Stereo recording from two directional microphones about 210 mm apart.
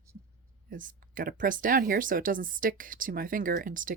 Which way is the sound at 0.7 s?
40° right (ahead or behind).